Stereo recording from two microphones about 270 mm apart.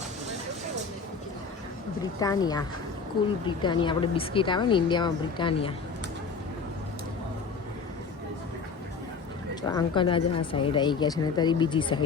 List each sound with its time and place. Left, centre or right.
2.1 s speech: centre
9.6 s speech: centre